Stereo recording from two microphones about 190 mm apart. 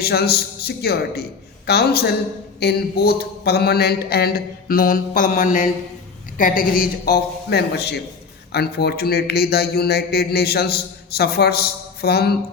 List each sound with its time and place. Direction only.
0.0 s a man's voice: 55° left (ahead or behind)